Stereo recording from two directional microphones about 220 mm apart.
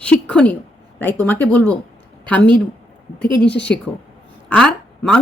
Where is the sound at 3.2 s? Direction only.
5° left (ahead or behind).